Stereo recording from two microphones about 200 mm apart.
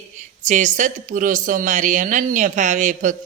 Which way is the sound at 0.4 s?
40° right (ahead or behind).